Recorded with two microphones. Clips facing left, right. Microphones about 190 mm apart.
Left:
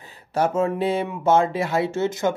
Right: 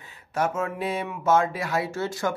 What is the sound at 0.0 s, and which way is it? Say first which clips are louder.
Speech: left 4 dB; 35° left (ahead or behind).